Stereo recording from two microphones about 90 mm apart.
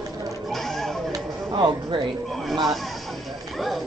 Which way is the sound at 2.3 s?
Centre (ahead or behind).